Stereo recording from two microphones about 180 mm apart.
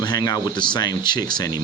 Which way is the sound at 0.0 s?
20° left (ahead or behind).